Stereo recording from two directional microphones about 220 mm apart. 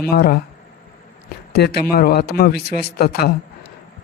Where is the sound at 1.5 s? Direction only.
45° left (ahead or behind).